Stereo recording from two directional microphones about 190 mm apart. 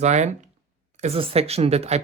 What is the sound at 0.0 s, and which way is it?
Speech, 40° right (ahead or behind).